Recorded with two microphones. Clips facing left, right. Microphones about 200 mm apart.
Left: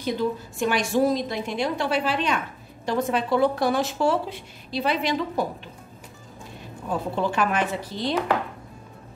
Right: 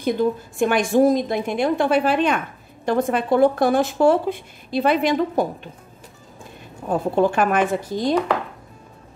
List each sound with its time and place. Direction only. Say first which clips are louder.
0.0 s a woman's voice: right 5 dB; 50° right (ahead or behind)
6.9 s a woman's voice: right 7 dB; 50° right (ahead or behind)